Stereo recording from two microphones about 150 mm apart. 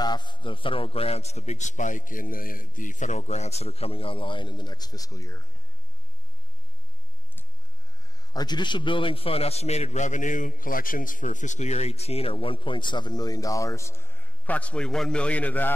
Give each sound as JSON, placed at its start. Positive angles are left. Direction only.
{"t": 0.0, "sound": "a man's voice", "side_deg": 30}
{"t": 8.1, "sound": "a man's voice", "side_deg": 25}